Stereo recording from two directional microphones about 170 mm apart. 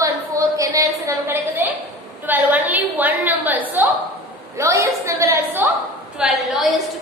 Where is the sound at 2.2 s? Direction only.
10° right (ahead or behind).